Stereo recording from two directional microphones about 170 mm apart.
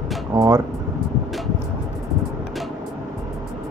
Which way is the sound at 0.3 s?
20° right (ahead or behind).